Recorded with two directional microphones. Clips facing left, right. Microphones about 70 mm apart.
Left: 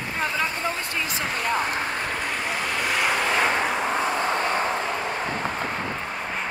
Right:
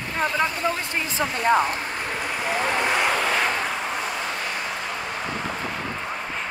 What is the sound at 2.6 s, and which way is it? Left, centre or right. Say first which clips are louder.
Vehicle: right 4 dB; right.